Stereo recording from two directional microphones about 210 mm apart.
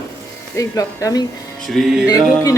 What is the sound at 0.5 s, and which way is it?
Speech, 15° left (ahead or behind).